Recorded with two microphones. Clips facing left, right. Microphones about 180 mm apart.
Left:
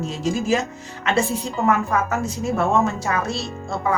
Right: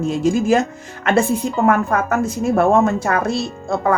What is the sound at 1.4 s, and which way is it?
A woman's voice, 55° right (ahead or behind).